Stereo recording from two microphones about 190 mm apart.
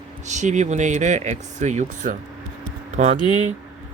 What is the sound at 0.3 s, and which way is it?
Speech, 40° right (ahead or behind).